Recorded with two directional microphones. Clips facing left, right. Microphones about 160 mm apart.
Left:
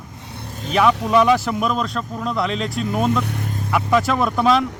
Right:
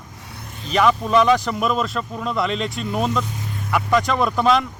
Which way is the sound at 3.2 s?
65° left (ahead or behind).